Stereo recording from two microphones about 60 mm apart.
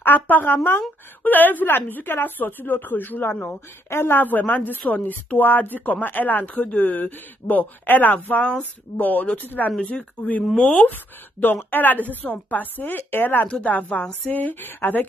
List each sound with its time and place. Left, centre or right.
0.0 s a woman's voice: left; by 10.9 s centre
10.9 s a woman's voice: left
13.5 s a woman's voice: left